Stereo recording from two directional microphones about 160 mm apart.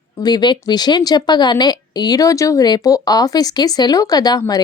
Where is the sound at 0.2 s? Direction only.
25° left (ahead or behind).